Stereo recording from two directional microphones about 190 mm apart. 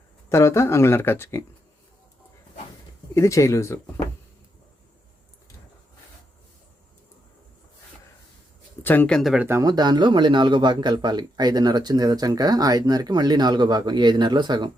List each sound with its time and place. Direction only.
0.3 s speech: 15° left (ahead or behind)
3.2 s speech: 15° left (ahead or behind)
8.8 s speech: 10° left (ahead or behind)
9.5 s speech: 20° right (ahead or behind)